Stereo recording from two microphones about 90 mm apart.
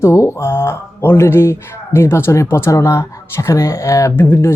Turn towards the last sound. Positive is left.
turn(degrees=30)  # may be behind; listen again after turning